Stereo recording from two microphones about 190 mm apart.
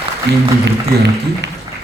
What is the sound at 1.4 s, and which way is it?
Music, 65° right (ahead or behind).